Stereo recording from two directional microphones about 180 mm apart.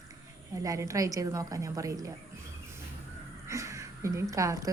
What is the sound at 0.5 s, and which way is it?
Speech, 20° right (ahead or behind).